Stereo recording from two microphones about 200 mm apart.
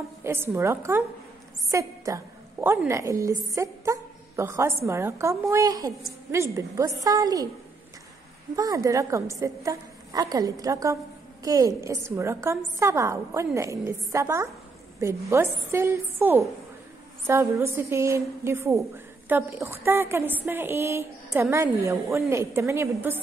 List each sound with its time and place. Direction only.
0.2 s a woman's voice: 10° right (ahead or behind)
8.5 s a woman's voice: 15° right (ahead or behind)